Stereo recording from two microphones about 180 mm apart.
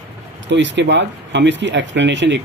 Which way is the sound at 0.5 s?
80° right.